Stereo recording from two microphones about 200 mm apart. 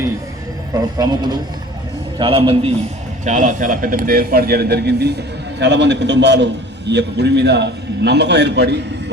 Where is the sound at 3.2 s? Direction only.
40° right (ahead or behind).